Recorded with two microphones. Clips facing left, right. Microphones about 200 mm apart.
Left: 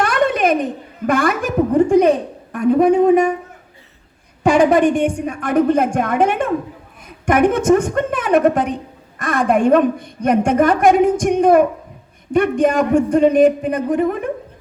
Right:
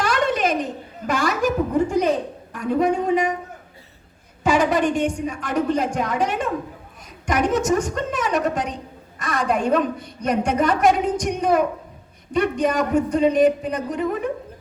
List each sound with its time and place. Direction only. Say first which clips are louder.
0.0 s a woman's voice: left 5 dB; 55° left (ahead or behind)
4.4 s a woman's voice: left 6 dB; 50° left (ahead or behind)